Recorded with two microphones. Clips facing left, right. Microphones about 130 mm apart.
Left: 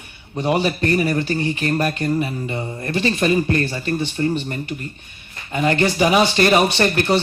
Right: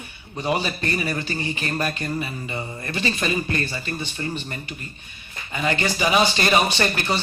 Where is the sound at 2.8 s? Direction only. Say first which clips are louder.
Left 7 dB; 55° left (ahead or behind).